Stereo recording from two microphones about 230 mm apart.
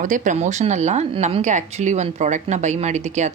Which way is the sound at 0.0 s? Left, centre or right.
Right.